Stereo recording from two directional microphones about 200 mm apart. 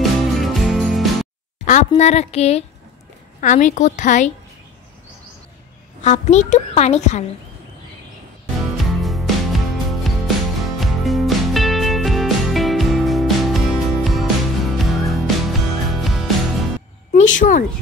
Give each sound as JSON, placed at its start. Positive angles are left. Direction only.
{"t": 0.3, "sound": "music", "side_deg": 0}
{"t": 1.9, "sound": "a woman's voice", "side_deg": 35}
{"t": 6.0, "sound": "a woman's voice", "side_deg": 35}
{"t": 8.5, "sound": "music", "side_deg": 0}
{"t": 17.1, "sound": "a woman's voice", "side_deg": 40}